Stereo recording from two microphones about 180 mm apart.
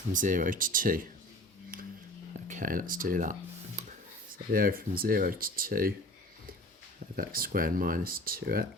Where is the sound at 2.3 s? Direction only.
45° right (ahead or behind).